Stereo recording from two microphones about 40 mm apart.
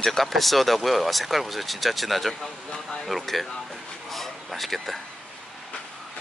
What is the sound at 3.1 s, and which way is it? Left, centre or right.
Speech, centre.